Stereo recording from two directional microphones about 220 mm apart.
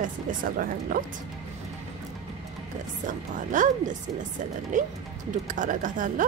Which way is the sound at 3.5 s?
35° right (ahead or behind).